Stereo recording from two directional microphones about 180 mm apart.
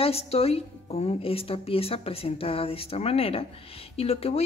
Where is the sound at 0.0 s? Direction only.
35° left (ahead or behind).